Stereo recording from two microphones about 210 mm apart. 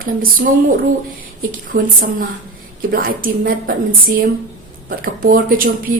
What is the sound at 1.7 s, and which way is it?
Speech, 40° right (ahead or behind).